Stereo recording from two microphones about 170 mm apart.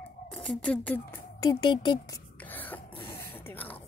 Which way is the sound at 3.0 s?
15° left (ahead or behind).